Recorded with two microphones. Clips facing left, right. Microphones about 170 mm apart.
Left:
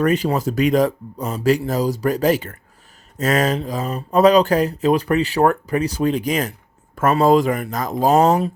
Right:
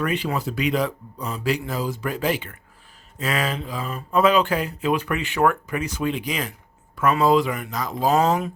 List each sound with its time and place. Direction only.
0.0 s speech: 40° left (ahead or behind)